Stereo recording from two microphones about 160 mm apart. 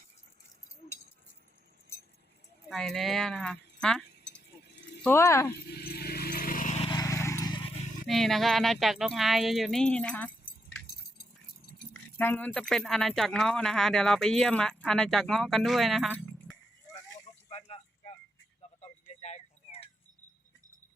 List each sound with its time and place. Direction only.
2.6 s speech: centre (ahead or behind)
5.0 s speech: 15° left (ahead or behind)
5.6 s a sound: 75° left (ahead or behind); by 6.7 s 60° left (ahead or behind)
6.7 s vehicle: 30° left (ahead or behind)
7.0 s vehicle: 20° left (ahead or behind)
8.0 s speech: centre (ahead or behind)
10.4 s keys jangling: 75° left (ahead or behind)
12.1 s speech: 15° left (ahead or behind)
17.5 s a sound: 40° left (ahead or behind)